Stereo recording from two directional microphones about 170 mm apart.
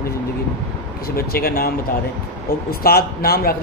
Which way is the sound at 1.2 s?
60° left (ahead or behind).